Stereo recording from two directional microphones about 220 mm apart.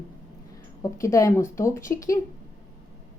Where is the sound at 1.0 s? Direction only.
15° left (ahead or behind).